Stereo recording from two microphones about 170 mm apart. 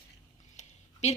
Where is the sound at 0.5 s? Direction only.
45° left (ahead or behind).